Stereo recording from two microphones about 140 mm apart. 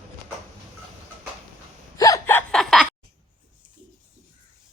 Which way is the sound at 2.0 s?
20° left (ahead or behind).